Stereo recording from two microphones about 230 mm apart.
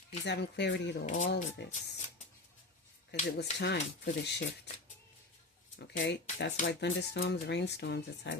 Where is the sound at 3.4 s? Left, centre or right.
Left.